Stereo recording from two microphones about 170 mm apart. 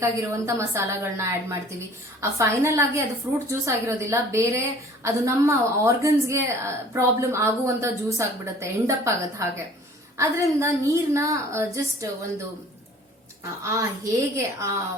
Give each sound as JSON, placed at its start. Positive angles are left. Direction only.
{"t": 0.0, "sound": "a woman's voice", "side_deg": -15}
{"t": 13.7, "sound": "a woman's voice", "side_deg": -20}